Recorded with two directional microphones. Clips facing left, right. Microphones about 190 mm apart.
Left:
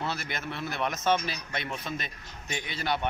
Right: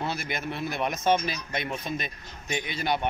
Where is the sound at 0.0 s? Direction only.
15° right (ahead or behind).